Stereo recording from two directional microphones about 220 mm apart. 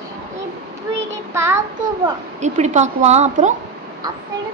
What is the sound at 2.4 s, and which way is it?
Speech, 30° right (ahead or behind).